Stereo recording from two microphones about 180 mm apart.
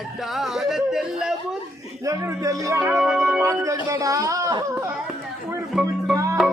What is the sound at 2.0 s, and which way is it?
Speech, 20° right (ahead or behind).